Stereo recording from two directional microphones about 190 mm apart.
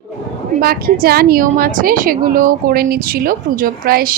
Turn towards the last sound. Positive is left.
turn(degrees=-50)  # may be behind; listen again after turning